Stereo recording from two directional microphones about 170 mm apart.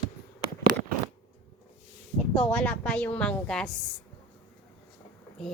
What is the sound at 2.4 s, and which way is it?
A woman's voice, 5° left (ahead or behind).